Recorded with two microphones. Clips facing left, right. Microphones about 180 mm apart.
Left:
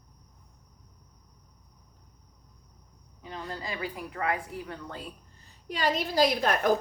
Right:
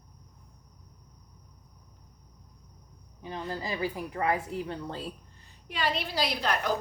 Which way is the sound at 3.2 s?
25° right (ahead or behind).